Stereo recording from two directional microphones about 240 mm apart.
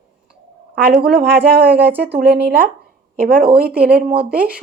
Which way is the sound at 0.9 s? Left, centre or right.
Right.